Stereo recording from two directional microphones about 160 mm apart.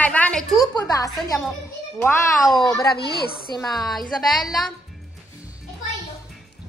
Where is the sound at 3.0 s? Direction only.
75° left (ahead or behind).